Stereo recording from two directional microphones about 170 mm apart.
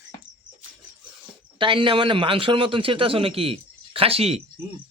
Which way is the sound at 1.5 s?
30° right (ahead or behind).